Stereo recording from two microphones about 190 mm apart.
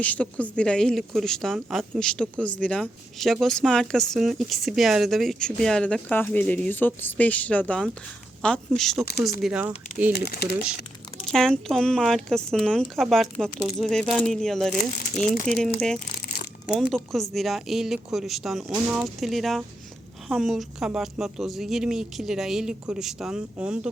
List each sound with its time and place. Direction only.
0.0 s speech: 5° left (ahead or behind)
10.1 s speech: 55° left (ahead or behind)
11.3 s speech: 5° left (ahead or behind)
14.8 s speech: 40° left (ahead or behind)
15.4 s speech: 5° left (ahead or behind)